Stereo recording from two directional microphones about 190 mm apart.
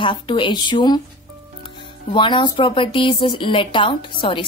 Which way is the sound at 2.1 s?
25° left (ahead or behind).